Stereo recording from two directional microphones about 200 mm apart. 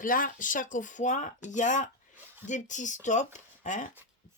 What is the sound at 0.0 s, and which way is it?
Speech, 40° left (ahead or behind).